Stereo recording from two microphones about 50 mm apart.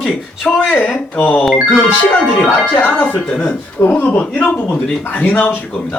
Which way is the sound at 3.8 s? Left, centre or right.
Left.